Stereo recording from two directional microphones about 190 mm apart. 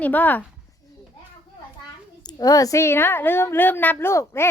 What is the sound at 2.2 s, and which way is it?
A woman's voice, 20° left (ahead or behind).